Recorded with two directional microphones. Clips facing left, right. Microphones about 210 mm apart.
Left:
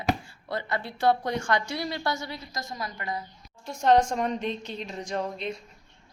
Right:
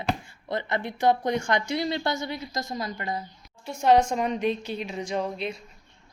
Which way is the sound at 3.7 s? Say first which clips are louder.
Right 1 dB; 5° right (ahead or behind).